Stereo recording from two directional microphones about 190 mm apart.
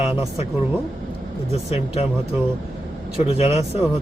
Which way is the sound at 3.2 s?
35° left (ahead or behind).